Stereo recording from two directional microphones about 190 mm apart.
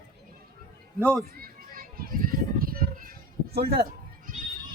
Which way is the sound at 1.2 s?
50° right (ahead or behind).